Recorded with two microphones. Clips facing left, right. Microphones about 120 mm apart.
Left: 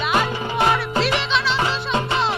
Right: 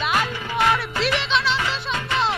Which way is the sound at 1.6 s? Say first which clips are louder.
Left 5 dB; 30° left (ahead or behind).